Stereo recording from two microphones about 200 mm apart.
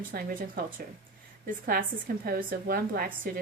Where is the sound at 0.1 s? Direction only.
45° right (ahead or behind).